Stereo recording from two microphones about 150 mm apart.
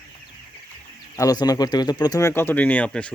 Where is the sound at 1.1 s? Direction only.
25° left (ahead or behind).